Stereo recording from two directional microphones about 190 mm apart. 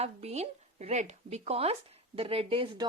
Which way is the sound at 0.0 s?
35° right (ahead or behind).